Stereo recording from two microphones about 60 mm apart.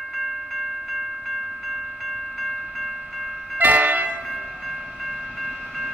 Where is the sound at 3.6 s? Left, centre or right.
Right.